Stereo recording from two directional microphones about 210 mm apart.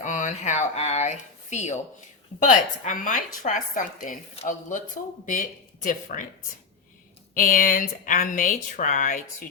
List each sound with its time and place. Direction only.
0.0 s a sound: 35° left (ahead or behind)
2.4 s speech: 35° left (ahead or behind)
5.8 s speech: 40° left (ahead or behind)
7.3 s speech: 40° left (ahead or behind)